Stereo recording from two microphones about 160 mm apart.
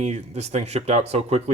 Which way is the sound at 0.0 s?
45° right (ahead or behind).